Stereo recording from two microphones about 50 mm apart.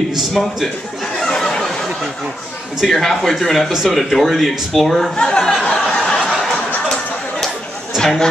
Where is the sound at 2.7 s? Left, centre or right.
Centre.